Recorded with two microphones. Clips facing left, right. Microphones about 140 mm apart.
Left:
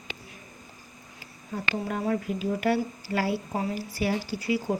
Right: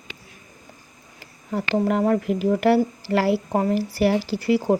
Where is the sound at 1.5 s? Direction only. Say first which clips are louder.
Right 9 dB; 75° right (ahead or behind).